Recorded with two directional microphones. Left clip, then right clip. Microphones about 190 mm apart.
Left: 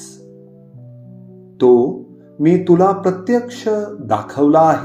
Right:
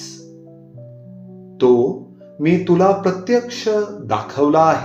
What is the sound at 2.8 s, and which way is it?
Speech, 45° left (ahead or behind).